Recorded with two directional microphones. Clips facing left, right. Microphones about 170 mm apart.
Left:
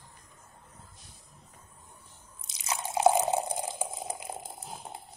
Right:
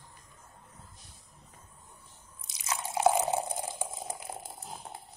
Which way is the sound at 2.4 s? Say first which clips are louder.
Left 1 dB; 20° left (ahead or behind).